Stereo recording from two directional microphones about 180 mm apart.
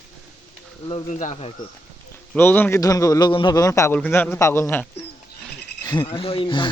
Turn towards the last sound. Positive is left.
turn(degrees=30)  # may be behind; listen again after turning